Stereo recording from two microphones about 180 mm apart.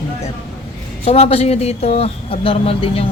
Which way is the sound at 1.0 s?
35° left (ahead or behind).